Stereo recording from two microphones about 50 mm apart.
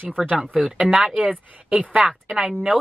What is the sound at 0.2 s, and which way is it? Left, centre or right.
Speech, centre.